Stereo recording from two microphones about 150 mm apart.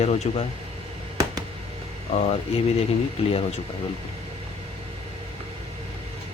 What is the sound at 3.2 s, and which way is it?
Speech, 40° left (ahead or behind).